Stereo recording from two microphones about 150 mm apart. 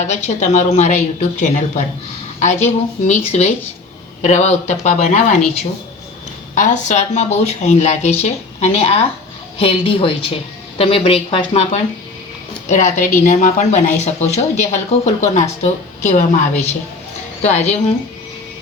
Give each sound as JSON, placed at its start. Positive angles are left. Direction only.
{"t": 0.0, "sound": "speech", "side_deg": 50}
{"t": 6.5, "sound": "a woman's voice", "side_deg": 55}